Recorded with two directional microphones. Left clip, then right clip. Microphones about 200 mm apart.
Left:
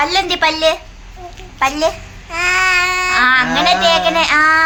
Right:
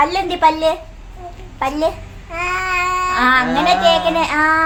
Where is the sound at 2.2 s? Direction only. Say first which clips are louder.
Left 6 dB; centre (ahead or behind).